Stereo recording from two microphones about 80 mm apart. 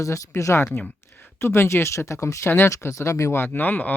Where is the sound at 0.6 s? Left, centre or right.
Left.